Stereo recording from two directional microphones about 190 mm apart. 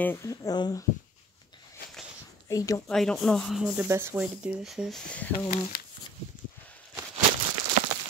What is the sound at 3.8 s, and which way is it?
Speech, 15° right (ahead or behind).